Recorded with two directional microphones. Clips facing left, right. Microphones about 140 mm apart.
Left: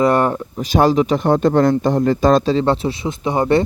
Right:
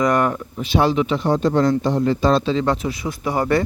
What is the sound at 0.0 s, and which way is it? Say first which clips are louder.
Speech: left 3 dB; 30° left (ahead or behind).